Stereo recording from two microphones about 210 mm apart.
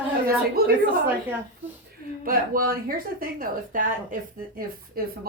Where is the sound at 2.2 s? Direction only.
45° right (ahead or behind).